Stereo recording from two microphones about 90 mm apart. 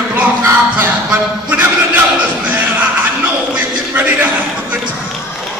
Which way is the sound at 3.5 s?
20° right (ahead or behind).